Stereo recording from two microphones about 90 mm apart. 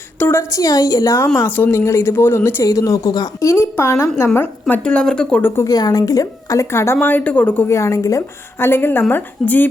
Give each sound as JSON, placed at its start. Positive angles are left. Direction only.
{"t": 0.2, "sound": "a woman's voice", "side_deg": 25}
{"t": 0.5, "sound": "a woman's voice", "side_deg": 40}
{"t": 1.5, "sound": "a woman's voice", "side_deg": 20}
{"t": 2.6, "sound": "a woman's voice", "side_deg": 40}
{"t": 4.7, "sound": "speech", "side_deg": 10}
{"t": 5.4, "sound": "a woman's voice", "side_deg": 25}
{"t": 5.6, "sound": "a woman's voice", "side_deg": 45}
{"t": 7.7, "sound": "a woman's voice", "side_deg": 35}